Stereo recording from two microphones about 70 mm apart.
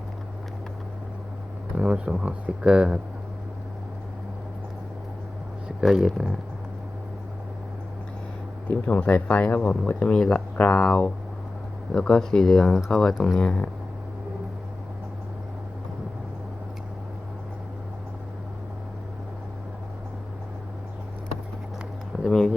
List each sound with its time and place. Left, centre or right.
1.7 s speech: centre
5.8 s speech: centre
8.7 s speech: left; by 13.4 s centre
13.4 s speech: centre
22.2 s speech: centre